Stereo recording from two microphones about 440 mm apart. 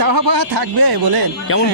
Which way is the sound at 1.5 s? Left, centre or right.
Left.